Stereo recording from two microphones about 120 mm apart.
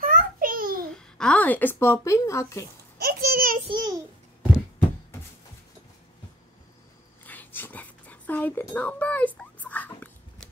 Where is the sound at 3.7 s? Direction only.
35° right (ahead or behind).